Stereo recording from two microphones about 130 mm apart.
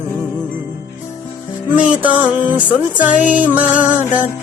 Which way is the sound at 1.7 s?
10° right (ahead or behind).